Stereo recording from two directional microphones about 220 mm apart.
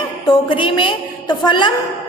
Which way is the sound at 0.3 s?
20° left (ahead or behind).